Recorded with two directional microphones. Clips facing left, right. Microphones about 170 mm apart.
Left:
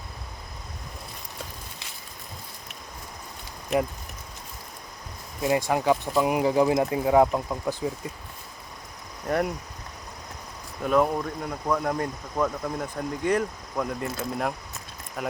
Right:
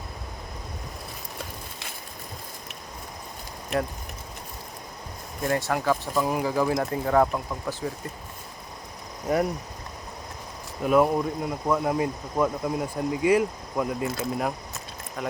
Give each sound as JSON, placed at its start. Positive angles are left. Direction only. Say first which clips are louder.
{"t": 5.4, "sound": "speech", "louder": "left 2 dB", "side_deg": 15}
{"t": 9.2, "sound": "speech", "louder": "right 1 dB", "side_deg": -5}
{"t": 10.8, "sound": "speech", "louder": "right 2 dB", "side_deg": -5}